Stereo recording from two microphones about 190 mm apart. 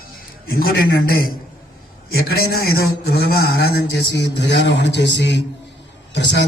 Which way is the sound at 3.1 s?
55° left (ahead or behind).